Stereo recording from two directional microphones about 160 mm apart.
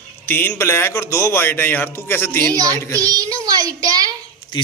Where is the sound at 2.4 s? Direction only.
25° right (ahead or behind).